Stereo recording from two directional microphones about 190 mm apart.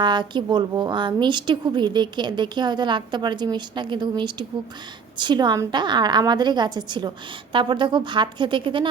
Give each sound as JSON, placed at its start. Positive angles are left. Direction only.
{"t": 0.0, "sound": "a woman's voice", "side_deg": -25}